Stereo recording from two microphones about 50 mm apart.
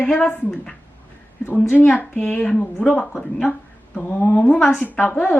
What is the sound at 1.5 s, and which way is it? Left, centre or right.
Speech, left.